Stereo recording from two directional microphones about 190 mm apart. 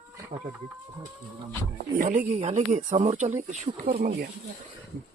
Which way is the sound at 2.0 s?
40° right (ahead or behind).